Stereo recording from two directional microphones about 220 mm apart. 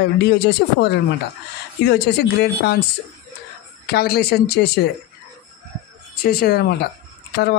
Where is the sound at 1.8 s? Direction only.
45° left (ahead or behind).